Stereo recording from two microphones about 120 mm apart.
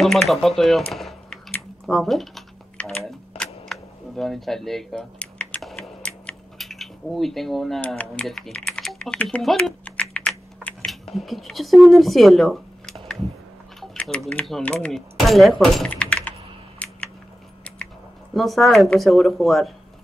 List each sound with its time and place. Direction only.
0.0 s speech: centre (ahead or behind)
1.9 s typing: centre (ahead or behind)
3.1 s camera: 5° left (ahead or behind)
5.6 s a sound: centre (ahead or behind)
7.8 s speech: 10° left (ahead or behind)
9.8 s typing: 10° left (ahead or behind)
11.1 s speech: centre (ahead or behind)
13.7 s typing: 5° left (ahead or behind)
14.6 s speech: 10° left (ahead or behind)
15.9 s typing: 10° left (ahead or behind)
16.8 s a sound: 10° left (ahead or behind)
18.3 s speech: centre (ahead or behind)